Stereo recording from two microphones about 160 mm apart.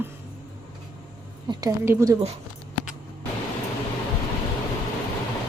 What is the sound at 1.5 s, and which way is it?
Speech, 20° right (ahead or behind).